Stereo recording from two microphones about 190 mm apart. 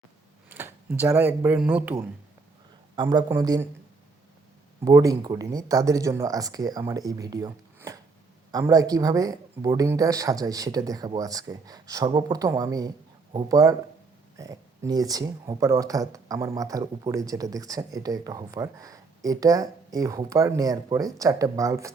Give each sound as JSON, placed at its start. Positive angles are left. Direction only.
{"t": 0.5, "sound": "a sound", "side_deg": -10}
{"t": 1.4, "sound": "speech", "side_deg": -10}
{"t": 2.9, "sound": "speech", "side_deg": -20}
{"t": 4.9, "sound": "speech", "side_deg": -15}